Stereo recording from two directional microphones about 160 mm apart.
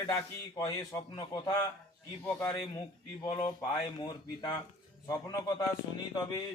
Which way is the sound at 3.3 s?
30° left (ahead or behind).